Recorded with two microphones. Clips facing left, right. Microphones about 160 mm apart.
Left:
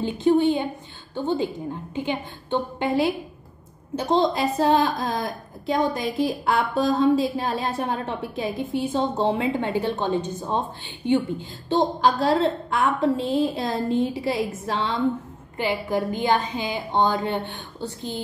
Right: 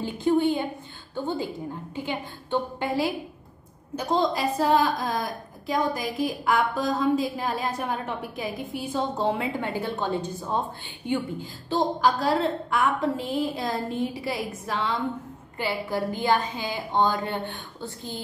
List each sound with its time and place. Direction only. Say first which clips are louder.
0.0 s a woman's voice: left 3 dB; 20° left (ahead or behind)
11.7 s a woman's voice: left 3 dB; 25° left (ahead or behind)